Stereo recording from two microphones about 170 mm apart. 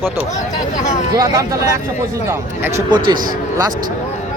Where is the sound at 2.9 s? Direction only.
25° right (ahead or behind).